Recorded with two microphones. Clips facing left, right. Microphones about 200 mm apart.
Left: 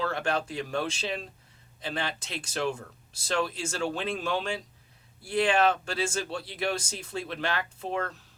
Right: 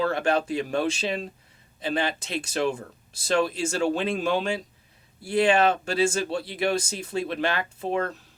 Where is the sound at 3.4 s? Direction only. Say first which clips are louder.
Right 6 dB; 20° right (ahead or behind).